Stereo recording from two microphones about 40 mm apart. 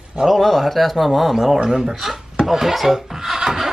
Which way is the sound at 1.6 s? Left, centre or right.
Centre.